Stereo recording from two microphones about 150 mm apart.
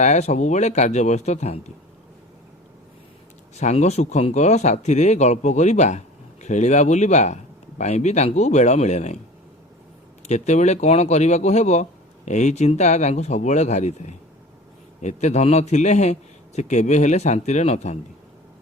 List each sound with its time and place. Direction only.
0.0 s speech: 50° left (ahead or behind)
3.5 s speech: 50° left (ahead or behind)
10.2 s speech: 50° left (ahead or behind)